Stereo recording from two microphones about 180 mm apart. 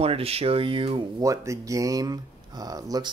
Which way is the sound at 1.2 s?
20° right (ahead or behind).